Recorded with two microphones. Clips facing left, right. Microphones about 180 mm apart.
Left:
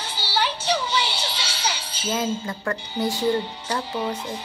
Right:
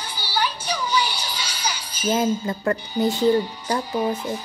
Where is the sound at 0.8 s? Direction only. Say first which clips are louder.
Right 2 dB; 10° right (ahead or behind).